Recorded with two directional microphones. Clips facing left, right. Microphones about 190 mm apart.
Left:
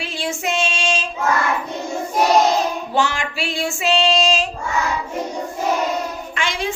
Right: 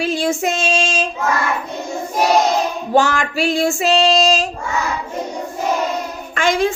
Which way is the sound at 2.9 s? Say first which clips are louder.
Right 9 dB; 45° right (ahead or behind).